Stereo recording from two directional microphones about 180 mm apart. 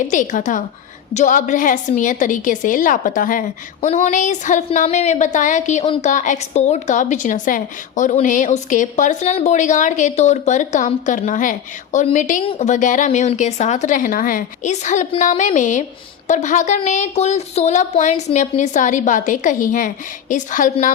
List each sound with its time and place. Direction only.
0.1 s a woman's voice: 45° left (ahead or behind)